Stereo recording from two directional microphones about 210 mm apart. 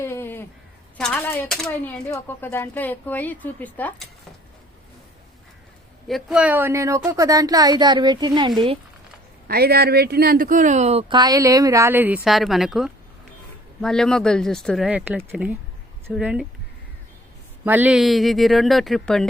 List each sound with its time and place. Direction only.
0.0 s crow: 10° left (ahead or behind)
0.9 s speech: 5° left (ahead or behind)
6.1 s speech: centre (ahead or behind); by 8.8 s 25° right (ahead or behind)
9.5 s speech: 45° right (ahead or behind); by 16.5 s 5° right (ahead or behind)
17.7 s speech: 5° right (ahead or behind)